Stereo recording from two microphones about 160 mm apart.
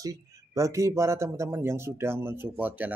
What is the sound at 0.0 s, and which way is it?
Speech, 20° right (ahead or behind).